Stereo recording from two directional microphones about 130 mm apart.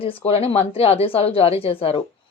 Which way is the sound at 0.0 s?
45° left (ahead or behind).